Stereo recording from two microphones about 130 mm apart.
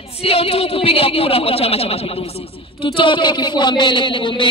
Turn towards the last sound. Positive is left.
turn(degrees=40)  # may be behind; listen again after turning